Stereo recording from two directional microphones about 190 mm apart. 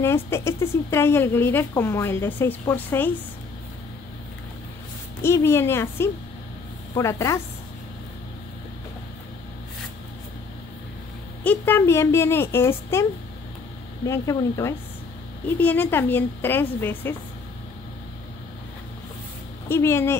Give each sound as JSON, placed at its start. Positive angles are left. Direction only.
{"t": 0.0, "sound": "speech", "side_deg": 15}
{"t": 5.2, "sound": "speech", "side_deg": 15}
{"t": 11.4, "sound": "speech", "side_deg": 10}
{"t": 14.0, "sound": "speech", "side_deg": 15}
{"t": 19.7, "sound": "speech", "side_deg": 10}